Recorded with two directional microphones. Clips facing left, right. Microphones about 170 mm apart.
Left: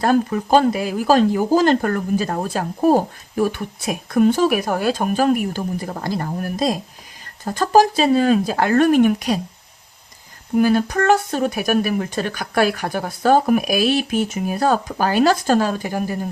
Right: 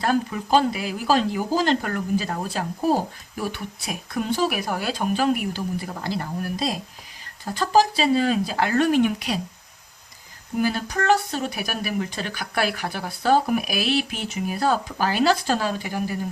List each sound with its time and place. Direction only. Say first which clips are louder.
0.0 s speech: left 6 dB; 50° left (ahead or behind)
10.6 s speech: left 7 dB; 55° left (ahead or behind)